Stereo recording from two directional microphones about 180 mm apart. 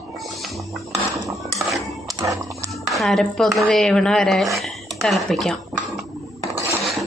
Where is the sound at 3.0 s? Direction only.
Centre (ahead or behind).